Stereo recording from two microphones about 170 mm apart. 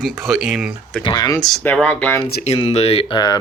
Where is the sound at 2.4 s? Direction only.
35° left (ahead or behind).